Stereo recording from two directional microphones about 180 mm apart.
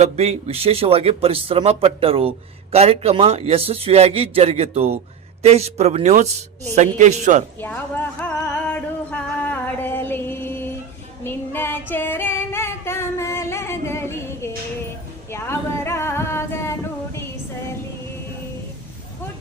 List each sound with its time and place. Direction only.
0.0 s a man's voice: 35° right (ahead or behind)
7.6 s a sound: 10° left (ahead or behind)
11.2 s female singing: 10° left (ahead or behind)